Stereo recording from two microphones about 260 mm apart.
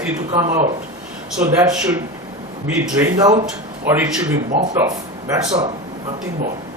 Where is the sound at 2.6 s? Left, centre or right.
Centre.